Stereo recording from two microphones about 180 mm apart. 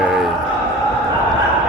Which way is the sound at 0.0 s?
5° right (ahead or behind).